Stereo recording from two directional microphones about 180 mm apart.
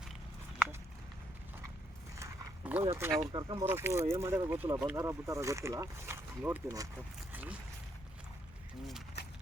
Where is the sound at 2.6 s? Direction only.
5° right (ahead or behind).